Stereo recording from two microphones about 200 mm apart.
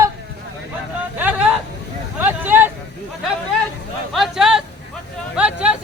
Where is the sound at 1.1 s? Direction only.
10° right (ahead or behind).